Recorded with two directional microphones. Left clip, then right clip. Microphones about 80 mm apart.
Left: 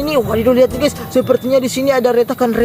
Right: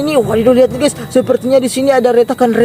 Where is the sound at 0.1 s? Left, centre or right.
Right.